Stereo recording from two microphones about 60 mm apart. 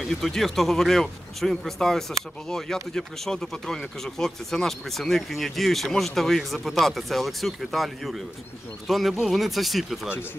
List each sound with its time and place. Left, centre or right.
0.0 s speech: centre